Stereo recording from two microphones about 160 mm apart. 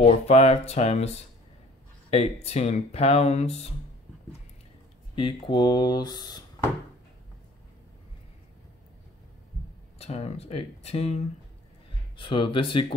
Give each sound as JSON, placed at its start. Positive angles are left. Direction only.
{"t": 0.0, "sound": "speech", "side_deg": 40}
{"t": 5.1, "sound": "speech", "side_deg": 30}
{"t": 9.9, "sound": "speech", "side_deg": 40}